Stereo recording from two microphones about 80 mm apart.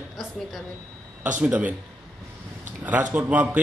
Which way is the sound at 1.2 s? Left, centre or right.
Centre.